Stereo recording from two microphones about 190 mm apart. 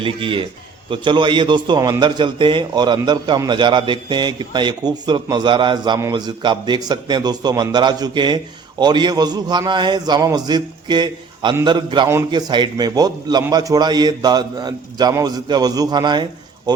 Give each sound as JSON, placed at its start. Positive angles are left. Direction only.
{"t": 0.0, "sound": "a man's voice", "side_deg": -25}